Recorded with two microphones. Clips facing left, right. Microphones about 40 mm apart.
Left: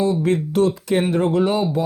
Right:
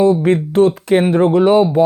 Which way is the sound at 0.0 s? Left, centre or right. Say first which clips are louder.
Right 6 dB; right.